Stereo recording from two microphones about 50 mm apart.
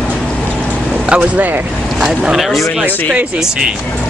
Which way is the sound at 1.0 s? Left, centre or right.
Right.